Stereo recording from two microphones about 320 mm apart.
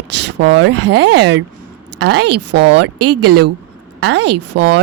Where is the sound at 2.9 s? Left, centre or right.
Right.